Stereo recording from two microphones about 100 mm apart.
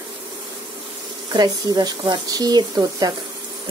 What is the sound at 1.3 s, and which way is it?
Speech, 40° right (ahead or behind).